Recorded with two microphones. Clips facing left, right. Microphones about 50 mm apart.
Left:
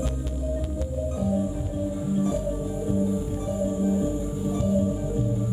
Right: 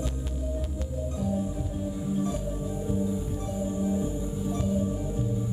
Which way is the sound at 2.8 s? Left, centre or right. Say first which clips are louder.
Left 4 dB; centre.